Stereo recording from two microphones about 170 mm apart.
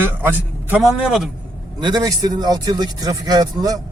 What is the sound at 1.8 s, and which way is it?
Speech, 25° right (ahead or behind).